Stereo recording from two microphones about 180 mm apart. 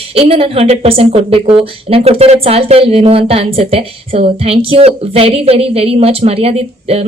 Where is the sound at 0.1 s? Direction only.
30° right (ahead or behind).